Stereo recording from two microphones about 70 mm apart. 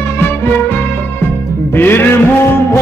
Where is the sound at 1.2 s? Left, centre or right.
Left.